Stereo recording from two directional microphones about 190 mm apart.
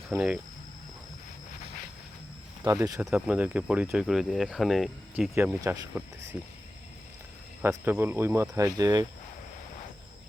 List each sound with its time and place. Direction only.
2.6 s speech: 15° right (ahead or behind)
3.0 s speech: 5° right (ahead or behind)
5.3 s speech: 10° right (ahead or behind)
7.6 s speech: 10° right (ahead or behind)